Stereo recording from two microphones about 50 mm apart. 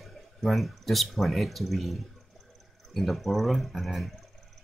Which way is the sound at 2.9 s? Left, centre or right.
Centre.